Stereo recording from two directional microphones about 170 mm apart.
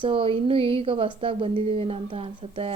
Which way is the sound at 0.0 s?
30° right (ahead or behind).